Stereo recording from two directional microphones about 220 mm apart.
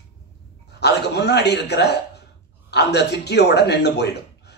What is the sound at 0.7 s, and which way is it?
Speech, 50° left (ahead or behind).